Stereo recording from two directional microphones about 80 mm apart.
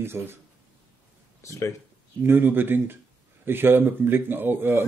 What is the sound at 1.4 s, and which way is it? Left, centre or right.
Speech, left.